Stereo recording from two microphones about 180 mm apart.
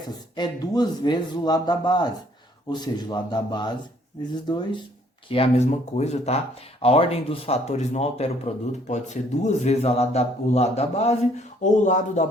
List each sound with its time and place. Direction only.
0.3 s speech: 20° left (ahead or behind)
5.3 s speech: 35° left (ahead or behind)